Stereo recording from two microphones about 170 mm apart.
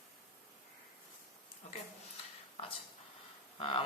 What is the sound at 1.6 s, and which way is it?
Speech, 45° left (ahead or behind).